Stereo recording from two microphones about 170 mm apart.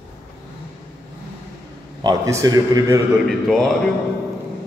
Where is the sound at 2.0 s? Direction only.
20° right (ahead or behind).